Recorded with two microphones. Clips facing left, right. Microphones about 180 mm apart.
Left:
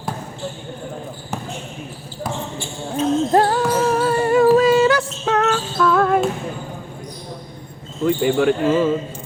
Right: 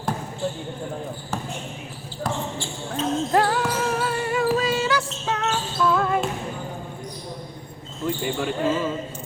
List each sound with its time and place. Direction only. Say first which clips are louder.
2.2 s speech: left 1 dB; 10° left (ahead or behind)
3.3 s basketball bounce: left 3 dB; 35° left (ahead or behind); by 6.1 s 60° left (ahead or behind)
8.0 s speech: left 9 dB; 70° left (ahead or behind)